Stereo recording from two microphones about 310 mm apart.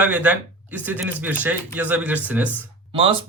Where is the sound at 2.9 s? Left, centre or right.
Centre.